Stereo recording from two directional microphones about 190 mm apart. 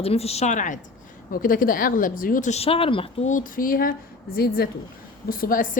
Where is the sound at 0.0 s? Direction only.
30° left (ahead or behind).